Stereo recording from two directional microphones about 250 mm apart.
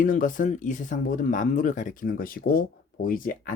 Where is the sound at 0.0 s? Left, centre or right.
Left.